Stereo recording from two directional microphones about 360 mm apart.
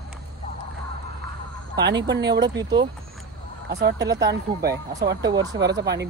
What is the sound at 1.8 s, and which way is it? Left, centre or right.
Speech, right.